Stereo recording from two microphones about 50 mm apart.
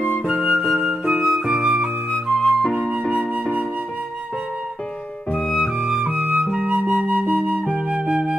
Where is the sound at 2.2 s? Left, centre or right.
Centre.